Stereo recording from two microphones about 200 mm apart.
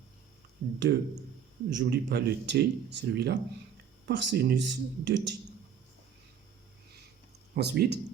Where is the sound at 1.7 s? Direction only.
60° right (ahead or behind).